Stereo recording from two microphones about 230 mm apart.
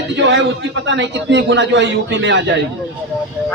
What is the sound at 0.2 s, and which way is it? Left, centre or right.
A man's voice, right.